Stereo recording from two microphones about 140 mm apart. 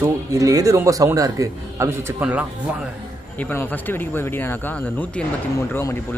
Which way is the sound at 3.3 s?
10° left (ahead or behind).